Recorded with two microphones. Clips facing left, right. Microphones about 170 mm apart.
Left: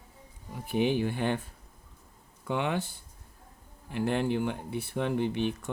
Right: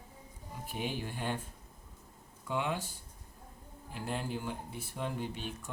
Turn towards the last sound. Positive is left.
turn(degrees=70)  # may be behind; listen again after turning